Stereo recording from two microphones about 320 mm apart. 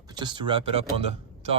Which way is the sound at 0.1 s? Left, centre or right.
Centre.